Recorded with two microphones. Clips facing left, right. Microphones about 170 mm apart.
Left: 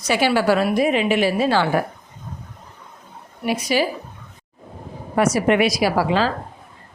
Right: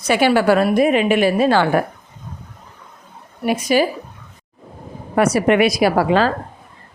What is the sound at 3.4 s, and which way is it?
Speech, 50° right (ahead or behind).